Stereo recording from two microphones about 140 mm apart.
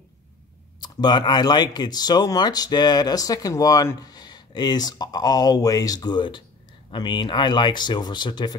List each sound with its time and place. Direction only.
0.7 s speech: 30° left (ahead or behind)